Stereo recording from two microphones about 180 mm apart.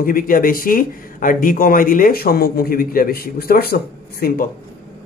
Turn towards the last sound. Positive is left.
turn(degrees=55)  # may be behind; listen again after turning